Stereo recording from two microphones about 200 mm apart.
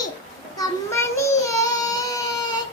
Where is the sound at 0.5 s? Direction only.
15° left (ahead or behind).